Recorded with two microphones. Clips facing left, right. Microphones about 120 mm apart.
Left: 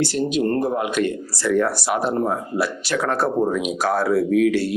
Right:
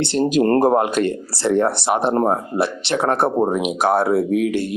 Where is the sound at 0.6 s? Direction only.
45° right (ahead or behind); by 3.5 s 25° right (ahead or behind).